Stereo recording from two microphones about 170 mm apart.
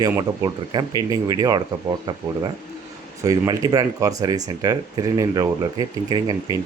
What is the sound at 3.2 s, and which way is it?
Speech, 20° right (ahead or behind).